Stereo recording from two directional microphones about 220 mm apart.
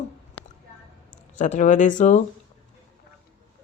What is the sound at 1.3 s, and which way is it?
Speech, 35° left (ahead or behind).